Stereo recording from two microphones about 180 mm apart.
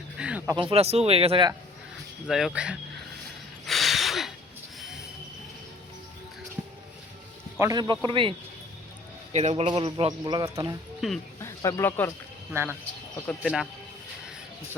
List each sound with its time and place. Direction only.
0.2 s a sound: 10° right (ahead or behind)
0.5 s speech: 30° right (ahead or behind)
2.2 s speech: centre (ahead or behind)
3.7 s a sound: centre (ahead or behind)
7.6 s a man's voice: 20° right (ahead or behind)
11.0 s speech: centre (ahead or behind)
11.3 s speech: 20° left (ahead or behind)
12.5 s speech: 15° right (ahead or behind)
13.1 s speech: 10° left (ahead or behind)